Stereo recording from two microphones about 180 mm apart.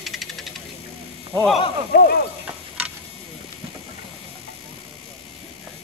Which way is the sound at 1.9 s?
60° left (ahead or behind).